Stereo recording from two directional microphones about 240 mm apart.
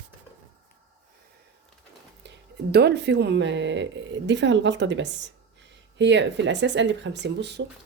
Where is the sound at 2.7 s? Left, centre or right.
Right.